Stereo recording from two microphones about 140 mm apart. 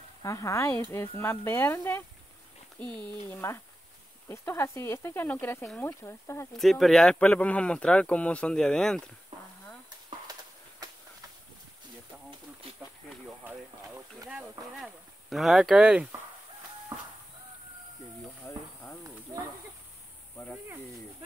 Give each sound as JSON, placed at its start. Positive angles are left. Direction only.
{"t": 0.2, "sound": "speech", "side_deg": 25}
{"t": 6.5, "sound": "speech", "side_deg": 0}
{"t": 13.9, "sound": "speech", "side_deg": -15}
{"t": 14.8, "sound": "speech", "side_deg": 0}
{"t": 18.4, "sound": "a sound", "side_deg": 15}